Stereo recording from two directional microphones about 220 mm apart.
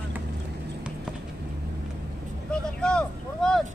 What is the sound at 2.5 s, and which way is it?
Vehicle, 5° left (ahead or behind).